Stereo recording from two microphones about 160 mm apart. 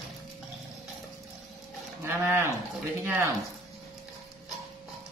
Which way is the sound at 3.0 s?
15° right (ahead or behind).